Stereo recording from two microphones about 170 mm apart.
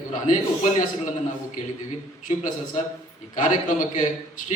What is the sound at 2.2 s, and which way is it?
Speech, 50° left (ahead or behind).